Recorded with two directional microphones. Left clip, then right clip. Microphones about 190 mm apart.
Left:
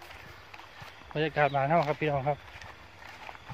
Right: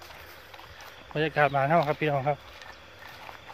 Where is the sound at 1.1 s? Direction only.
15° right (ahead or behind).